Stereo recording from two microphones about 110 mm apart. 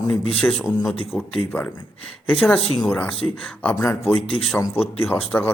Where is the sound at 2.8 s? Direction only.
15° left (ahead or behind).